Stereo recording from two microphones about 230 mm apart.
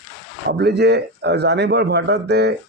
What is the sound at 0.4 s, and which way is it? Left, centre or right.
A man's voice, right.